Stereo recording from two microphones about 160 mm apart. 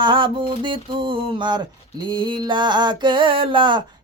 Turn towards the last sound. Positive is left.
turn(degrees=-30)  # may be behind; listen again after turning